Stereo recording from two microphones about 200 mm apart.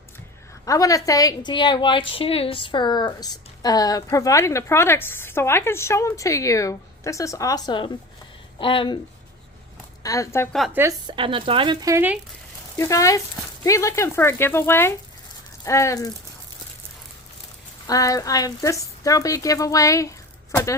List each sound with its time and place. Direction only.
0.6 s a woman's voice: 15° left (ahead or behind)
10.0 s a woman's voice: 15° left (ahead or behind)
10.8 s speech: 20° right (ahead or behind)
12.7 s a woman's voice: 15° left (ahead or behind)
17.8 s speech: 15° left (ahead or behind)